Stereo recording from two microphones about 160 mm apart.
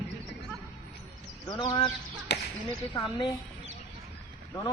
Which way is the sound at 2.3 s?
90° left.